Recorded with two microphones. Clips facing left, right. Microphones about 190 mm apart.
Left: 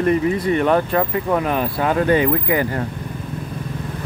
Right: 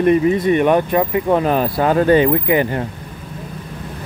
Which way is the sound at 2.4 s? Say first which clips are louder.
Right 3 dB; 20° right (ahead or behind).